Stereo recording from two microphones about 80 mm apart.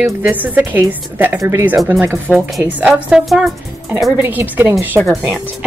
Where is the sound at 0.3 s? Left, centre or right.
Centre.